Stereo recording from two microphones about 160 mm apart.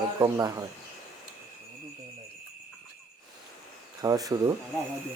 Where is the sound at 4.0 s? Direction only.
20° right (ahead or behind).